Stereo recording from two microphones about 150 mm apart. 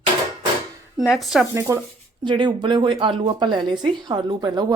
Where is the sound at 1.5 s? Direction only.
15° right (ahead or behind).